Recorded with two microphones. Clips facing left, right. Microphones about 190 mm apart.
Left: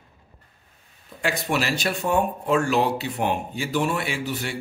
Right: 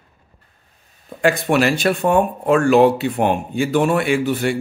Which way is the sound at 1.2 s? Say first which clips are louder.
Right 9 dB; 55° right (ahead or behind).